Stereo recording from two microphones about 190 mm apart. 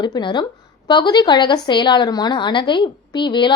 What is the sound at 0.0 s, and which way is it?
A woman's voice, 25° left (ahead or behind).